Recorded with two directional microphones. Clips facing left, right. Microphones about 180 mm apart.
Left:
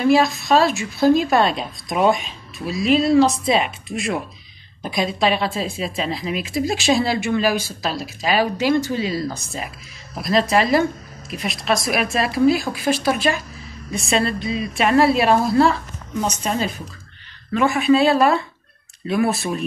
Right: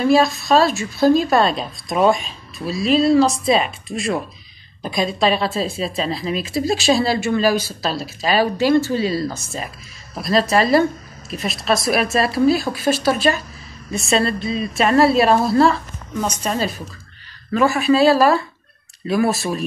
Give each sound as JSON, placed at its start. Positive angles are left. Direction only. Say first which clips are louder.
{"t": 0.0, "sound": "a woman's voice", "louder": "right 1 dB", "side_deg": 15}